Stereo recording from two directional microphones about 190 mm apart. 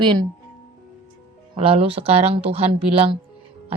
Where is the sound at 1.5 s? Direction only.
30° right (ahead or behind).